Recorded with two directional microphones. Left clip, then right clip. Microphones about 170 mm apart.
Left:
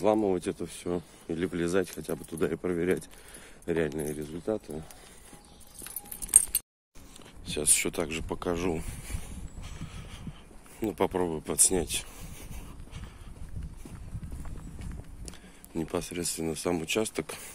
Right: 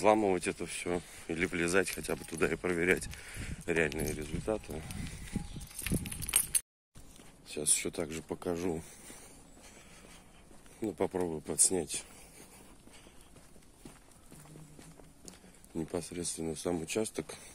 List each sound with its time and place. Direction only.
0.0 s speech: 10° right (ahead or behind); by 4.8 s 5° left (ahead or behind)
7.4 s speech: 10° right (ahead or behind)
10.8 s speech: 15° right (ahead or behind)
15.2 s speech: 15° right (ahead or behind)